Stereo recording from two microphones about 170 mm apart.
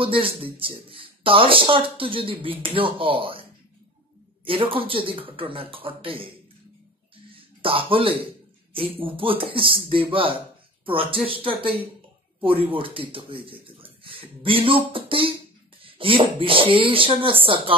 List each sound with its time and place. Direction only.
0.0 s speech: 30° right (ahead or behind)
4.5 s speech: 30° right (ahead or behind)
7.2 s music: 30° right (ahead or behind)
8.7 s speech: 30° right (ahead or behind)